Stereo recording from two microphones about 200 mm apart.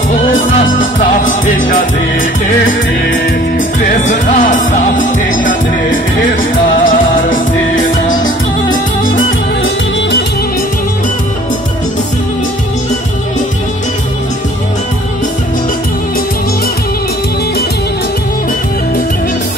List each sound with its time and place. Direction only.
0.1 s music: 45° left (ahead or behind)
4.1 s music: 40° left (ahead or behind)
6.8 s music: 40° left (ahead or behind)